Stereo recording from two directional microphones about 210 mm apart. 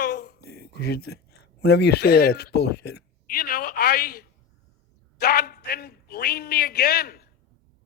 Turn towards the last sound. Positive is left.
turn(degrees=50)  # may be behind; listen again after turning